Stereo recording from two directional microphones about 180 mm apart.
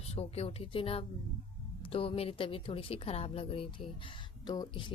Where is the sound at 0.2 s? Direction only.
35° left (ahead or behind).